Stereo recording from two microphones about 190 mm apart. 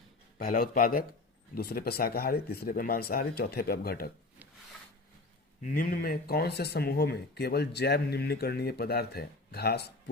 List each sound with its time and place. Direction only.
0.3 s speech: 50° left (ahead or behind)
5.7 s speech: 50° left (ahead or behind)